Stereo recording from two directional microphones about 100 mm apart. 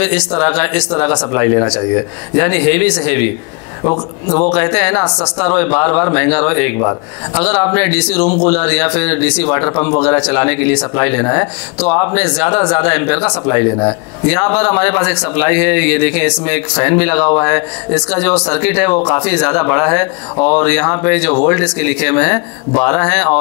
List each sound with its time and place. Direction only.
0.0 s speech: 15° left (ahead or behind)
3.8 s speech: 30° left (ahead or behind)
4.4 s speech: 15° left (ahead or behind)